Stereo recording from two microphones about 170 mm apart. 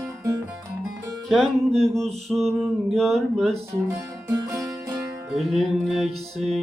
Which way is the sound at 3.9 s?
15° right (ahead or behind).